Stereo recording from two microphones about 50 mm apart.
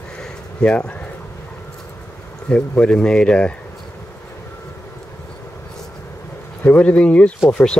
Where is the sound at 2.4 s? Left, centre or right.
Left.